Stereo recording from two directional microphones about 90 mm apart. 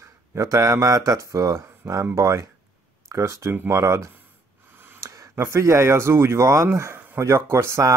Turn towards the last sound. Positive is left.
turn(degrees=-30)  # may be behind; listen again after turning